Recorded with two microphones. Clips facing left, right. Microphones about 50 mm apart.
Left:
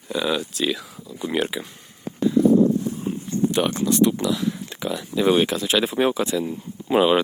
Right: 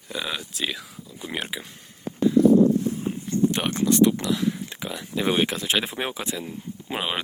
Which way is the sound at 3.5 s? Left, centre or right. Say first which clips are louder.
Left 2 dB; right.